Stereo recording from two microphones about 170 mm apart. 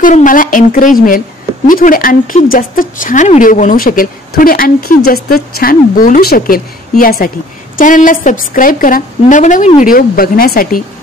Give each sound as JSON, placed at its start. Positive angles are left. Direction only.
{"t": 0.0, "sound": "a woman's voice", "side_deg": 50}